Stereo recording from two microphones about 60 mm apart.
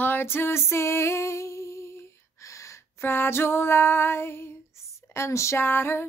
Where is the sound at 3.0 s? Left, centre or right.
Left.